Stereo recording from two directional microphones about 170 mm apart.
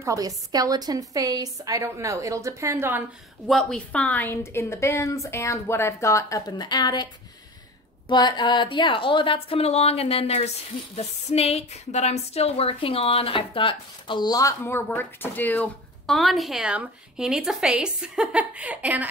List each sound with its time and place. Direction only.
0.0 s a woman's voice: 20° right (ahead or behind)
3.4 s speech: 5° left (ahead or behind); by 7.1 s 25° left (ahead or behind)
8.1 s speech: 25° left (ahead or behind); by 19.0 s 10° right (ahead or behind)